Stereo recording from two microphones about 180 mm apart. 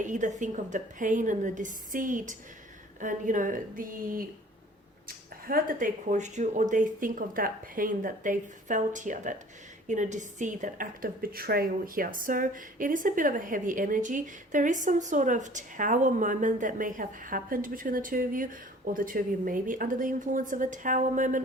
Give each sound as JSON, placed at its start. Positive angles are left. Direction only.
{"t": 0.0, "sound": "a woman's voice", "side_deg": -45}